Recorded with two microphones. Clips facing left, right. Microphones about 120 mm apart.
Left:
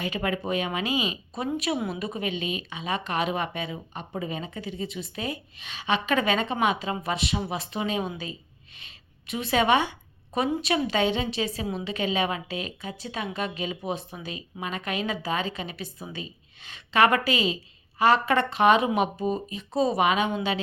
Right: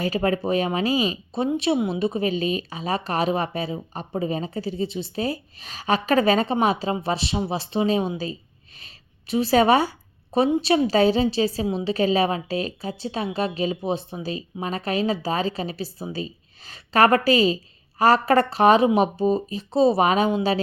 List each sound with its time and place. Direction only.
0.0 s speech: 35° right (ahead or behind)